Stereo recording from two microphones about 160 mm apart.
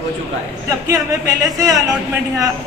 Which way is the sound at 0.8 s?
20° right (ahead or behind).